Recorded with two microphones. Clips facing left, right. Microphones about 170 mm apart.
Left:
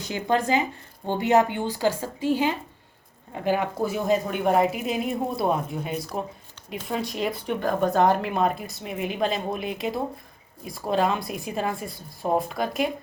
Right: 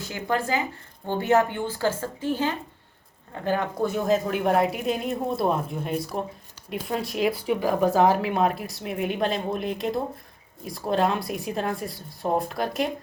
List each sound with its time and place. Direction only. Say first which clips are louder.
0.0 s a woman's voice: left 3 dB; 20° left (ahead or behind); by 12.9 s centre (ahead or behind)